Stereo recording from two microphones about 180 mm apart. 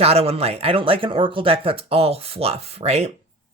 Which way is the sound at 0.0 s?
35° right (ahead or behind).